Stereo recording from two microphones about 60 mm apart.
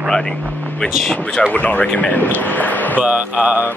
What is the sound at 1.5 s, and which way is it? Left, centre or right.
Speech, left.